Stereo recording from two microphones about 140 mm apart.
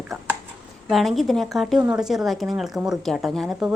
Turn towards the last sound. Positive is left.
turn(degrees=-5)  # may be behind; listen again after turning